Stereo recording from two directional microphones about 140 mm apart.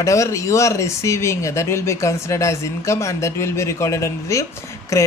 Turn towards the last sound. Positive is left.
turn(degrees=20)  # may be behind; listen again after turning